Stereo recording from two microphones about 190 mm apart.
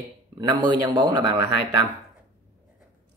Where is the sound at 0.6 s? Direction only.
25° right (ahead or behind).